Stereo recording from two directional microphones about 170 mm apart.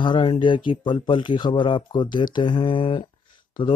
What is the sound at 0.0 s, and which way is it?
Speech, 30° left (ahead or behind).